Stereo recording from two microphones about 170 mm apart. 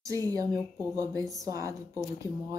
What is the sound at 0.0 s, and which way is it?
Speech, 20° right (ahead or behind).